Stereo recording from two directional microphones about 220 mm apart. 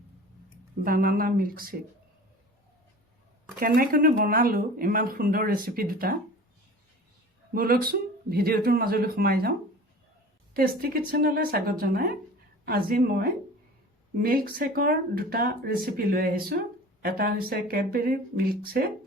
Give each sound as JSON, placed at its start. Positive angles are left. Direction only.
{"t": 0.9, "sound": "speech", "side_deg": -40}
{"t": 3.6, "sound": "speech", "side_deg": -40}
{"t": 7.5, "sound": "speech", "side_deg": -40}